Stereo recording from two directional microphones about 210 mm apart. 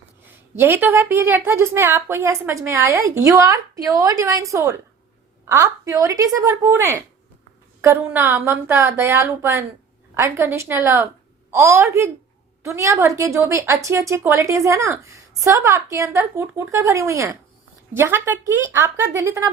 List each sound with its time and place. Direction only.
0.5 s a woman's voice: 10° right (ahead or behind)